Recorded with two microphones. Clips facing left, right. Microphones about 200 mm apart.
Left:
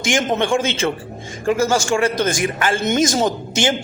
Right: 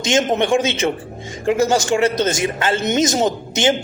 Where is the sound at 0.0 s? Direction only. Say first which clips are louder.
Right 2 dB; 20° right (ahead or behind).